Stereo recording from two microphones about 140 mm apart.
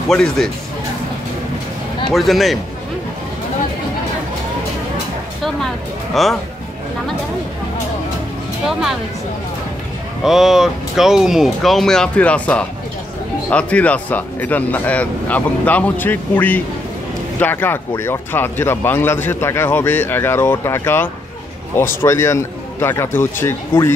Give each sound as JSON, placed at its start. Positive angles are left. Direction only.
{"t": 0.1, "sound": "speech", "side_deg": 5}
{"t": 2.1, "sound": "speech", "side_deg": 0}
{"t": 6.2, "sound": "speech", "side_deg": 0}
{"t": 10.2, "sound": "speech", "side_deg": 0}